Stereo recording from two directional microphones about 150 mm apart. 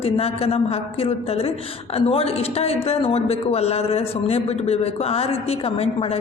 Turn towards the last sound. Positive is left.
turn(degrees=40)  # may be behind; listen again after turning